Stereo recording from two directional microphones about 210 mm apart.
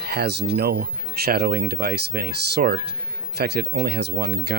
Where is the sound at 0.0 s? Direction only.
50° right (ahead or behind).